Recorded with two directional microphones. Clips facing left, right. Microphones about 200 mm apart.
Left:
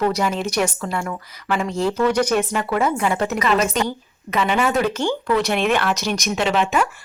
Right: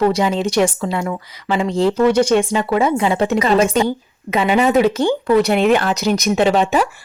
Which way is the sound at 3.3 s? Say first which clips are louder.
Right 5 dB; 30° right (ahead or behind).